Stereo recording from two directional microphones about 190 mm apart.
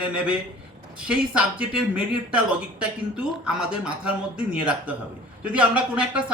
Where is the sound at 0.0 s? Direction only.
5° right (ahead or behind).